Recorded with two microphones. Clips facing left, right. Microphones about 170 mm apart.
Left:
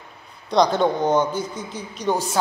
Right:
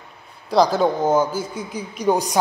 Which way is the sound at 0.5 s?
5° right (ahead or behind).